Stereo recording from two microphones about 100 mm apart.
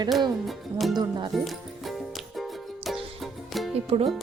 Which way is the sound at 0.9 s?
45° right (ahead or behind).